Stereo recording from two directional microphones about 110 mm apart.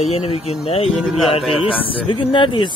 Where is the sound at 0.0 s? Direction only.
65° left (ahead or behind).